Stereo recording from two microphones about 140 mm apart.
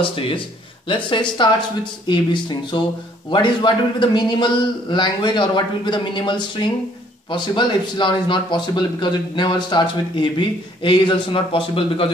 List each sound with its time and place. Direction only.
0.0 s a man's voice: 40° left (ahead or behind)